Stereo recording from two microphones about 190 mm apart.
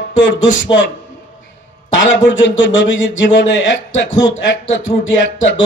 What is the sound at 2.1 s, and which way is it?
A man's voice, 75° left (ahead or behind).